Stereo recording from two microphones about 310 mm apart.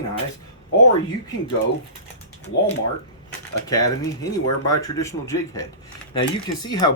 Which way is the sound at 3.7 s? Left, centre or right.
Centre.